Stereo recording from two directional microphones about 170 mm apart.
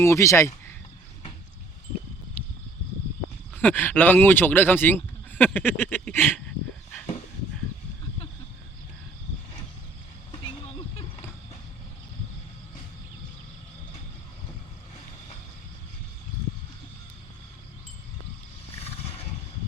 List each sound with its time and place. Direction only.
0.0 s speech: 15° left (ahead or behind)
3.5 s speech: 10° left (ahead or behind)
10.4 s a sound: 30° left (ahead or behind)
18.8 s roar: 35° left (ahead or behind)